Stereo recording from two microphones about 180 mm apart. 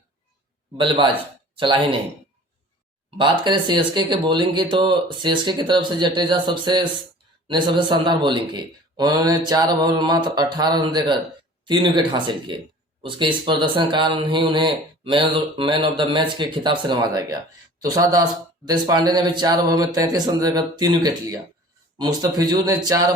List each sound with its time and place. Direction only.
0.8 s speech: 25° right (ahead or behind)
3.2 s speech: 25° right (ahead or behind)